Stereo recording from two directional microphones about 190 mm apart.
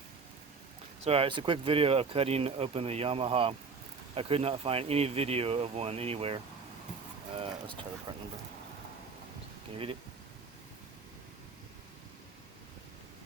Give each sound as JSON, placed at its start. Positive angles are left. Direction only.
{"t": 1.0, "sound": "speech", "side_deg": -30}
{"t": 7.3, "sound": "a sound", "side_deg": -25}
{"t": 8.1, "sound": "speech", "side_deg": -20}
{"t": 9.7, "sound": "speech", "side_deg": -30}